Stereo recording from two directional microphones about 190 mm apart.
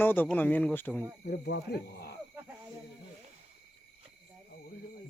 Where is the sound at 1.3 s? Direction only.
55° left (ahead or behind).